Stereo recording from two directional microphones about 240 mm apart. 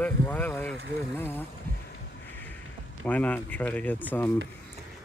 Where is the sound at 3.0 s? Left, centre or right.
Centre.